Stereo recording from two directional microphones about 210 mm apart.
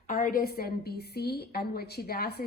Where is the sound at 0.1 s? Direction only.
40° left (ahead or behind).